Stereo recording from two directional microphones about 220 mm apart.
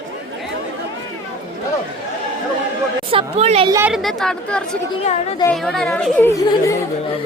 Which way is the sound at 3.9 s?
Centre (ahead or behind).